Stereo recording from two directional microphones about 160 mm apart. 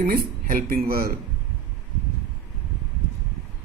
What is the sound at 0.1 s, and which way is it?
A man's voice, 60° right (ahead or behind).